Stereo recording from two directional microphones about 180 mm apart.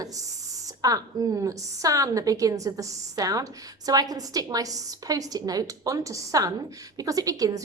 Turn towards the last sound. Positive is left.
turn(degrees=-20)  # may be behind; listen again after turning